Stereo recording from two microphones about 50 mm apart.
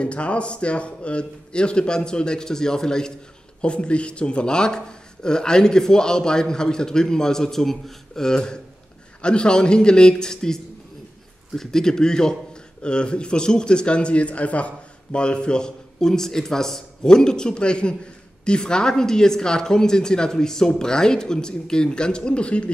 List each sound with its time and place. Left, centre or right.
0.0 s a man's voice: left